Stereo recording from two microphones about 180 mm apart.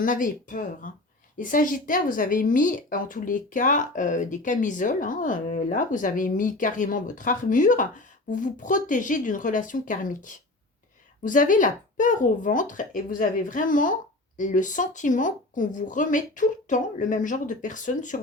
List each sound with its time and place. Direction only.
0.0 s a woman's voice: 45° left (ahead or behind)